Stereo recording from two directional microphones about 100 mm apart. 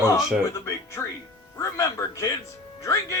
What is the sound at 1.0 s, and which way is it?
Speech, 25° left (ahead or behind).